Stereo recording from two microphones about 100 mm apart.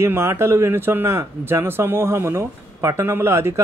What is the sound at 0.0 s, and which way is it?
Speech, 25° right (ahead or behind).